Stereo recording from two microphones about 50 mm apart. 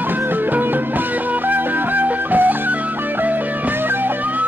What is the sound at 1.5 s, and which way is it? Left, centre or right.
Music, right.